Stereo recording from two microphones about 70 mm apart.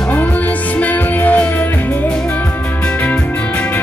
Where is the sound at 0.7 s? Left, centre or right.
Left.